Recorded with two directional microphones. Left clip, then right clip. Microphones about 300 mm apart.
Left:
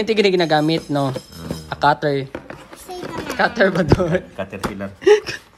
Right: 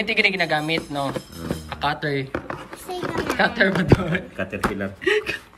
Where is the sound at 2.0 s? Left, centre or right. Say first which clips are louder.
Left 5 dB; centre.